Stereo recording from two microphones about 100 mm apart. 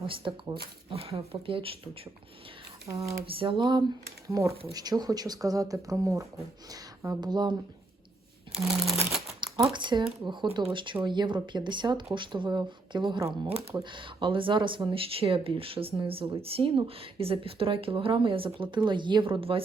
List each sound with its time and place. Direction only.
0.0 s speech: 60° right (ahead or behind)
0.9 s speech: 75° right (ahead or behind)
2.8 s speech: 35° right (ahead or behind)
3.2 s speech: 60° right (ahead or behind)
4.3 s speech: 30° right (ahead or behind)
4.7 s speech: 40° right (ahead or behind)
7.2 s speech: 45° right (ahead or behind)
8.5 s a sound: centre (ahead or behind)
9.4 s a sound: 55° right (ahead or behind)
9.7 s speech: 50° right (ahead or behind); by 19.6 s 65° right (ahead or behind)